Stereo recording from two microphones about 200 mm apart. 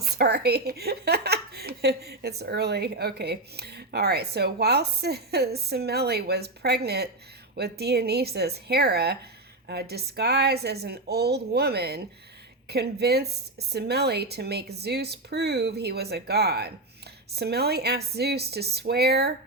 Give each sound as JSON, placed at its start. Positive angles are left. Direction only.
{"t": 0.0, "sound": "a woman's voice", "side_deg": -50}